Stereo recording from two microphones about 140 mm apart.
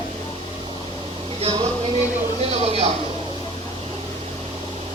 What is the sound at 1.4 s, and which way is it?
Music, 35° right (ahead or behind).